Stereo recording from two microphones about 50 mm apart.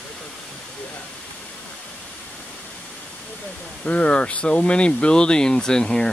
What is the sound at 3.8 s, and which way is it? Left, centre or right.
Speech, left.